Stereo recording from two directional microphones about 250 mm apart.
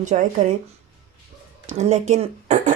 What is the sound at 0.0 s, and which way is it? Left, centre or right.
Speech, right.